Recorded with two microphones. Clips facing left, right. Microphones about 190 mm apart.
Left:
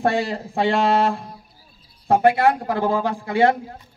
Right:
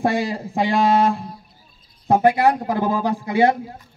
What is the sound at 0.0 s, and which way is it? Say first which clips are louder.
A man's voice: even; 15° right (ahead or behind).